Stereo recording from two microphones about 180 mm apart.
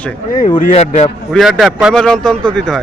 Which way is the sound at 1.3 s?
Centre (ahead or behind).